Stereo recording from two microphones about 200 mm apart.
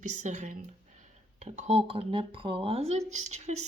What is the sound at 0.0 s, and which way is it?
Speech, 40° right (ahead or behind).